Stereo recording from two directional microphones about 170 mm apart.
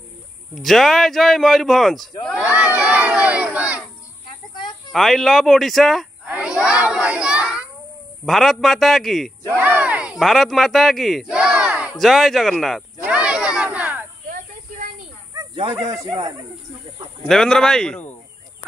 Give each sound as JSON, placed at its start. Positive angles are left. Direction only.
{"t": 0.6, "sound": "speech", "side_deg": 0}
{"t": 2.2, "sound": "crowd", "side_deg": -5}
{"t": 4.9, "sound": "speech", "side_deg": 0}
{"t": 6.3, "sound": "children playing", "side_deg": -5}
{"t": 8.3, "sound": "speech", "side_deg": 0}
{"t": 13.0, "sound": "battle cry", "side_deg": -5}
{"t": 15.7, "sound": "speech", "side_deg": -20}
{"t": 17.3, "sound": "speech", "side_deg": 5}